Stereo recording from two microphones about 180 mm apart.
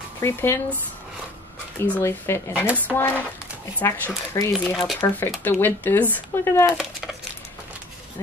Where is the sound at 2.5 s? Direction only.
5° right (ahead or behind).